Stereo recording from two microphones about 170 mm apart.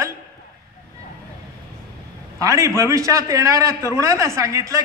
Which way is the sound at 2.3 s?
20° right (ahead or behind).